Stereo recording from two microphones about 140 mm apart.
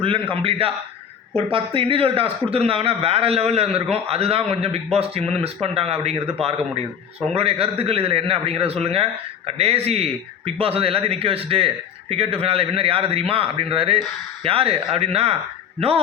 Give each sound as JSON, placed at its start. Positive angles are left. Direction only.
{"t": 0.0, "sound": "a man's voice", "side_deg": -40}
{"t": 7.3, "sound": "a man's voice", "side_deg": -45}